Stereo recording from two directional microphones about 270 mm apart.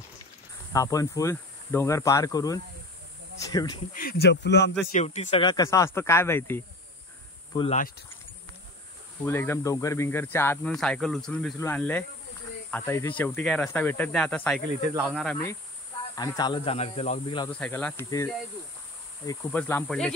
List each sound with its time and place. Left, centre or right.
0.7 s speech: centre
3.9 s speech: left
4.9 s speech: left; by 6.6 s centre
7.5 s speech: centre
9.2 s speech: centre
16.2 s speech: centre
17.5 s speech: centre